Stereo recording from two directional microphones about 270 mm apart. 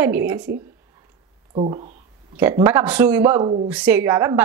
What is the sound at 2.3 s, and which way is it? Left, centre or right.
Speech, centre.